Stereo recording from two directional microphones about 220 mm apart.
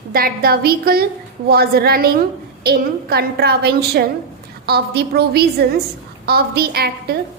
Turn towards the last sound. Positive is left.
turn(degrees=-45)  # may be behind; listen again after turning